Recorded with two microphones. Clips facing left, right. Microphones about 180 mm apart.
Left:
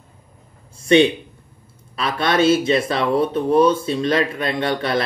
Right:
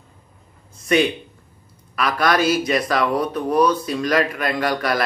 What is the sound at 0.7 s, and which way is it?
A man's voice, 30° left (ahead or behind).